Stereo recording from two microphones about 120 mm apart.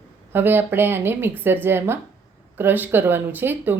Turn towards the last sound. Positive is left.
turn(degrees=-15)  # may be behind; listen again after turning